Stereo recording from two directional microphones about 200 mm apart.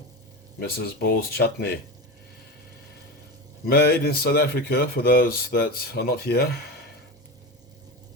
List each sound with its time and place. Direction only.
0.6 s speech: 50° left (ahead or behind)
3.7 s speech: 50° left (ahead or behind)